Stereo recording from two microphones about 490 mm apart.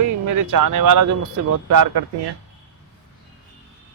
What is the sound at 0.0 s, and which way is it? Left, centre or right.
Speech, right.